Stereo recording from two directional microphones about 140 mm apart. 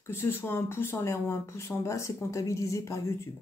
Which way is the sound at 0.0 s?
15° left (ahead or behind).